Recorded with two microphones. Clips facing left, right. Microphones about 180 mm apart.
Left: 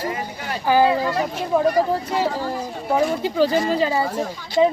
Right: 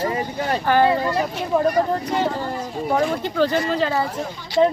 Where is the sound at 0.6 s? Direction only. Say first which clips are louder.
Left 1 dB; 5° left (ahead or behind).